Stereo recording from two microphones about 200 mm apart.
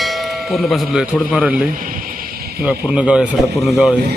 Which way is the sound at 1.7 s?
45° right (ahead or behind).